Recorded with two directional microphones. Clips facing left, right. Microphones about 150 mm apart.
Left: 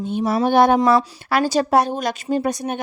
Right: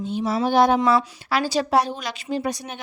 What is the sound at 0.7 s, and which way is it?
Speech, 40° left (ahead or behind).